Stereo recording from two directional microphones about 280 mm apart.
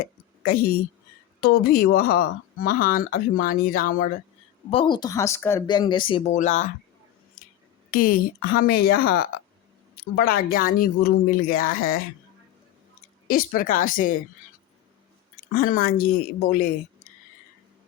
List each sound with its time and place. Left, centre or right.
0.4 s speech: left
4.7 s speech: centre
7.4 s a sound: left
7.9 s speech: left
13.2 s speech: left
15.5 s speech: left